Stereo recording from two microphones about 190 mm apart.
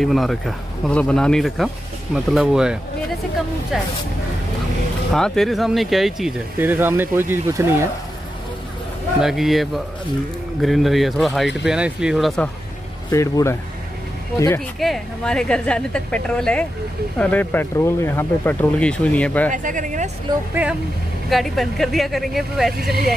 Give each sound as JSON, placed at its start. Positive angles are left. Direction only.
{"t": 0.0, "sound": "speech", "side_deg": 0}
{"t": 5.1, "sound": "speech", "side_deg": 0}
{"t": 9.2, "sound": "speech", "side_deg": 0}
{"t": 13.1, "sound": "speech", "side_deg": 15}
{"t": 14.8, "sound": "speech", "side_deg": 0}
{"t": 19.5, "sound": "speech", "side_deg": -45}
{"t": 20.6, "sound": "speech", "side_deg": -10}